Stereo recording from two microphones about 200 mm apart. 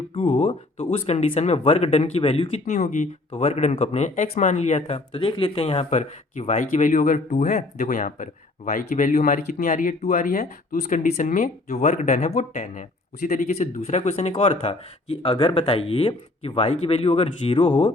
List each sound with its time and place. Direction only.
0.1 s speech: 30° left (ahead or behind)